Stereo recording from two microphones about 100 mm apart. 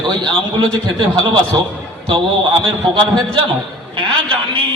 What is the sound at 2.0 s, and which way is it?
A man's voice, 55° right (ahead or behind).